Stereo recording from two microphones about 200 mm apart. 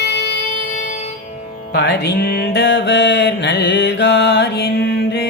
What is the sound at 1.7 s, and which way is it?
Music, 55° left (ahead or behind).